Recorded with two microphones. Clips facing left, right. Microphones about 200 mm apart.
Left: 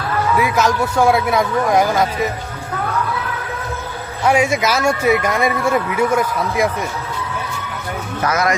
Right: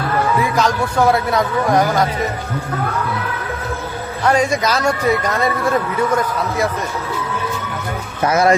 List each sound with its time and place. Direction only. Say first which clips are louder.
0.3 s a man's voice: left 1 dB; 5° left (ahead or behind)
4.3 s a man's voice: even; 5° left (ahead or behind)
8.2 s speech: right 5 dB; 30° right (ahead or behind)